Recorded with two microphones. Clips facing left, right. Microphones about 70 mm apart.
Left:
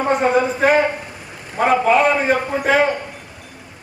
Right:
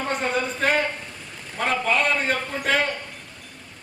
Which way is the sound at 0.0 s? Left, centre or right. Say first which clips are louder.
Left 9 dB; centre.